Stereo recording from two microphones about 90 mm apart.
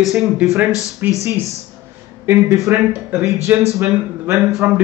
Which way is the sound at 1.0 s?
20° right (ahead or behind).